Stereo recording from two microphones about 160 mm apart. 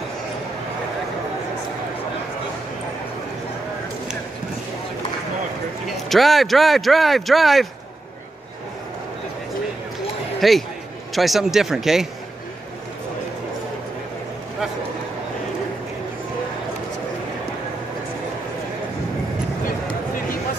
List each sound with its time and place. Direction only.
5.9 s speech: centre (ahead or behind)
10.4 s speech: centre (ahead or behind)